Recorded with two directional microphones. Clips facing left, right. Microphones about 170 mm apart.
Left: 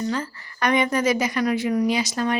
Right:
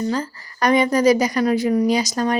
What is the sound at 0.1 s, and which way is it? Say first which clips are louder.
A woman's voice: right 3 dB; 35° right (ahead or behind).